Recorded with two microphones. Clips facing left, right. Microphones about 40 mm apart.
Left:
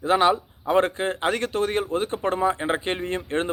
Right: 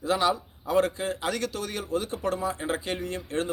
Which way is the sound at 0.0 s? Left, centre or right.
Left.